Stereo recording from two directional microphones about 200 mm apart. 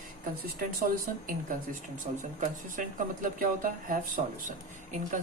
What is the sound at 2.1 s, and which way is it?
Speech, 40° right (ahead or behind).